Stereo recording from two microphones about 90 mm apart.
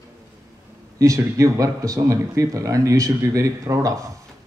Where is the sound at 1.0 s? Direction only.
35° right (ahead or behind).